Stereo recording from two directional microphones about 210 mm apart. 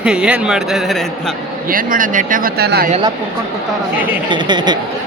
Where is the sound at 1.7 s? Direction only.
40° right (ahead or behind).